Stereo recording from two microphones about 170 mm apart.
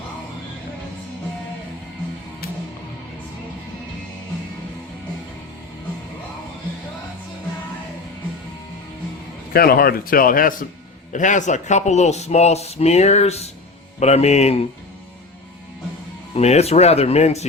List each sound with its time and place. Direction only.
9.5 s speech: 60° left (ahead or behind); by 14.7 s 40° left (ahead or behind)
16.3 s speech: 40° left (ahead or behind)